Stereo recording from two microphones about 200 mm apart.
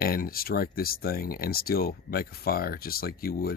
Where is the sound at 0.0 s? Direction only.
45° left (ahead or behind).